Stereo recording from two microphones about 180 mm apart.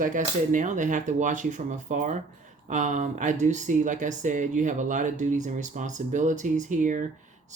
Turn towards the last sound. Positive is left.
turn(degrees=-45)  # may be behind; listen again after turning